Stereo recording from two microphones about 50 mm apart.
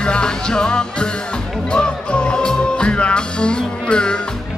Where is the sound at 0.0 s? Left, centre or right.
Centre.